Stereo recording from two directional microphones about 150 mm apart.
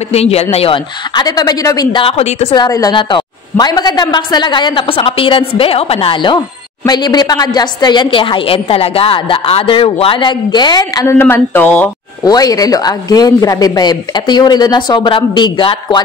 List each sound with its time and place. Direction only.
0.1 s speech: 45° left (ahead or behind)
1.1 s a woman's voice: 25° left (ahead or behind)
2.5 s a woman's voice: 25° left (ahead or behind)
12.3 s a woman's voice: 25° left (ahead or behind)